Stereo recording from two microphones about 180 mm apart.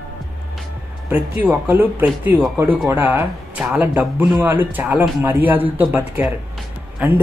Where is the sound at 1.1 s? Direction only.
10° right (ahead or behind).